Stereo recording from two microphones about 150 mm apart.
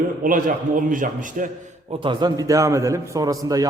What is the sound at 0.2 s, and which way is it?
A man's voice, 65° right (ahead or behind).